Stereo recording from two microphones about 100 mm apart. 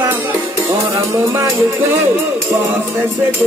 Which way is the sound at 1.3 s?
25° right (ahead or behind).